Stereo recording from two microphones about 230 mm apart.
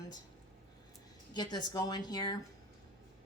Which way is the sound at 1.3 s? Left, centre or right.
Centre.